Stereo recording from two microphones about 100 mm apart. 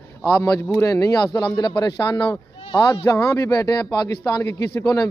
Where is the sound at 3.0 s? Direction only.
30° left (ahead or behind).